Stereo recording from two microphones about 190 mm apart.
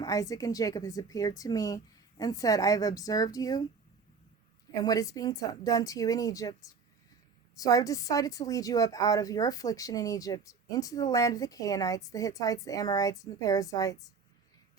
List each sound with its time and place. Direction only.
0.0 s a woman's voice: 20° left (ahead or behind)
4.7 s a woman's voice: 20° left (ahead or behind)